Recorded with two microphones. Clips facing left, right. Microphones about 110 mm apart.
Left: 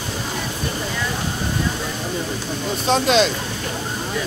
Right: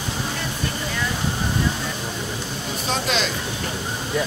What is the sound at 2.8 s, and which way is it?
Speech, 25° left (ahead or behind).